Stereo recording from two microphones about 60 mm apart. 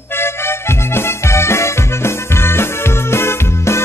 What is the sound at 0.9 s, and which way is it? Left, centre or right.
Music, left.